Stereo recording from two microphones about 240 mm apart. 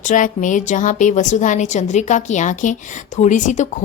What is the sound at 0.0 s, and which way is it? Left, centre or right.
A woman's voice, left.